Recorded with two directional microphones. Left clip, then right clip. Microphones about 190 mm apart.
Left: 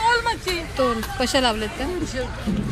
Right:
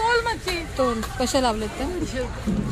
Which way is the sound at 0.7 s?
Centre (ahead or behind).